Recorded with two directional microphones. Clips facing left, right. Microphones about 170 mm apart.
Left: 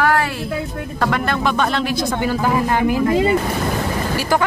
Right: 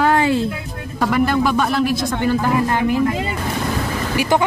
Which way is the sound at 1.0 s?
10° right (ahead or behind).